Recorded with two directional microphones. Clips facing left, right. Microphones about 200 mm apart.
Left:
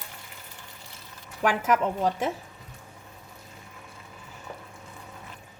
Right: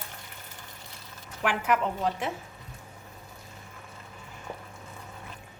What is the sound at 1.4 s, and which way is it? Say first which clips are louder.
Speech: left 3 dB; 40° left (ahead or behind).